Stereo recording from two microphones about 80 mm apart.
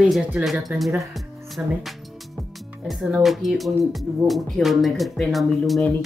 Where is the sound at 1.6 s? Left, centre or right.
Centre.